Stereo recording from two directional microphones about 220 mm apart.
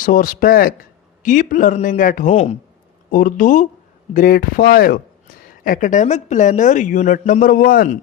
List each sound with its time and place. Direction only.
0.0 s speech: 40° left (ahead or behind)